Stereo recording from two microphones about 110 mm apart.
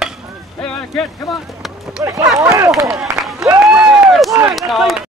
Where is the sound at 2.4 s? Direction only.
30° right (ahead or behind).